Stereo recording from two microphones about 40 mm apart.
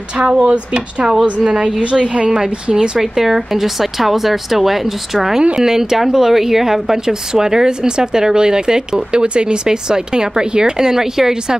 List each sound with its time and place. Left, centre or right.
0.4 s speech: right
3.0 s speech: centre